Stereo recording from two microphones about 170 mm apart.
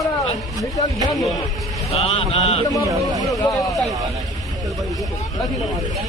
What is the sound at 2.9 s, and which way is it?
Speech, 20° right (ahead or behind).